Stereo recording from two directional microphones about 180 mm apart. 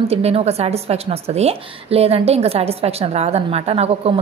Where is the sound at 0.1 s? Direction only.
35° right (ahead or behind).